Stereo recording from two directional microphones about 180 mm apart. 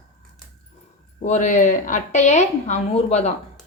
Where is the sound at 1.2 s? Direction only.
45° left (ahead or behind).